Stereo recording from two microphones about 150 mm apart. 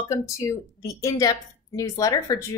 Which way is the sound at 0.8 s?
20° left (ahead or behind).